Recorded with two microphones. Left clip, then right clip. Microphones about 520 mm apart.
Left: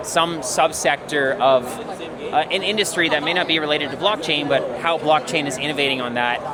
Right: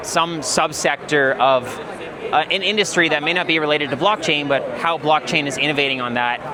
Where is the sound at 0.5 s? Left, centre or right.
Right.